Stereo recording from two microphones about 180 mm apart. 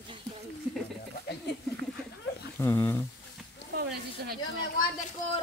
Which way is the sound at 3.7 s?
60° right (ahead or behind).